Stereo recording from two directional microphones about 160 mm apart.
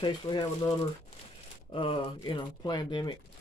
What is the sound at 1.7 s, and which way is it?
Speech, 30° left (ahead or behind).